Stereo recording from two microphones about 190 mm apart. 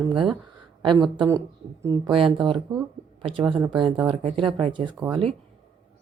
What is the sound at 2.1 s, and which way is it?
Speech, 25° right (ahead or behind).